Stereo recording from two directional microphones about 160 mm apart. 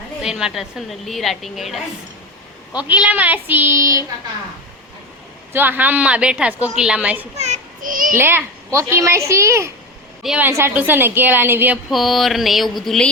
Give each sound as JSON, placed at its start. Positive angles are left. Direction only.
{"t": 0.2, "sound": "a woman's voice", "side_deg": -5}
{"t": 2.8, "sound": "a woman's voice", "side_deg": -10}
{"t": 5.5, "sound": "a woman's voice", "side_deg": -10}
{"t": 7.3, "sound": "a sound", "side_deg": -45}
{"t": 8.1, "sound": "a woman's voice", "side_deg": -15}
{"t": 11.9, "sound": "a woman's voice", "side_deg": 0}